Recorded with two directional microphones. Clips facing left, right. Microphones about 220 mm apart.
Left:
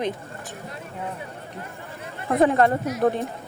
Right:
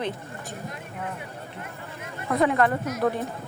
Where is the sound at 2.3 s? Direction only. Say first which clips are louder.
Left 3 dB; 30° left (ahead or behind).